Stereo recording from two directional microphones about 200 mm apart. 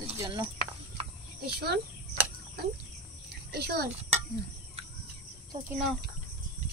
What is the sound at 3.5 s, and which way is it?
Speech, 55° right (ahead or behind).